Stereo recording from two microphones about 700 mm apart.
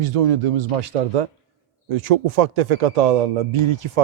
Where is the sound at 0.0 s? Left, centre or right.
Right.